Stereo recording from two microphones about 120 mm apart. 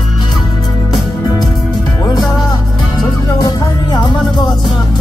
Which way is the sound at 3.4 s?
35° left (ahead or behind).